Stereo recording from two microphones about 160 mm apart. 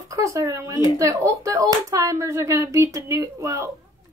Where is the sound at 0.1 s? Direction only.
20° right (ahead or behind).